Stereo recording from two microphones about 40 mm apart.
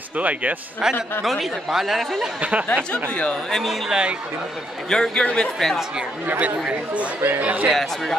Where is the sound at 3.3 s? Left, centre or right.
Centre.